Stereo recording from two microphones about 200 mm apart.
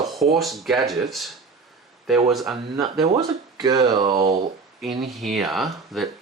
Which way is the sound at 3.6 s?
20° right (ahead or behind).